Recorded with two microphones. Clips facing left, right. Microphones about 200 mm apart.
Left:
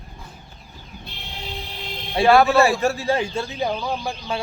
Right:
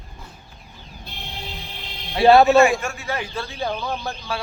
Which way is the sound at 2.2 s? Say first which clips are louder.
Right 2 dB; 25° right (ahead or behind).